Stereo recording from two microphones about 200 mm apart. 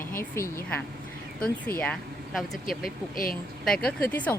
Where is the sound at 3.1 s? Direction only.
45° left (ahead or behind).